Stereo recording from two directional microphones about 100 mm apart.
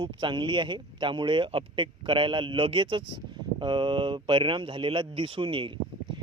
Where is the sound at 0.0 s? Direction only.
55° right (ahead or behind).